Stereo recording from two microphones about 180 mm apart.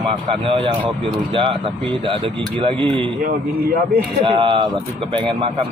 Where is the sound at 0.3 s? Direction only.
30° right (ahead or behind).